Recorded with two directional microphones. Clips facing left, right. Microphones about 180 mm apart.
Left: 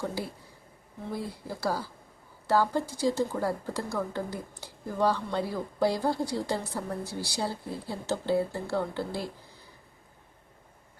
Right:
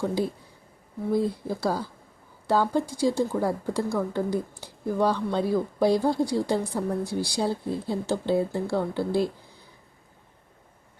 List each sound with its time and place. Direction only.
0.0 s speech: 15° right (ahead or behind)